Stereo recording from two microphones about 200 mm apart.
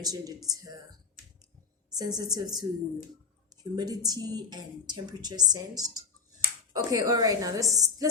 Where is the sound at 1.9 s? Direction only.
20° right (ahead or behind).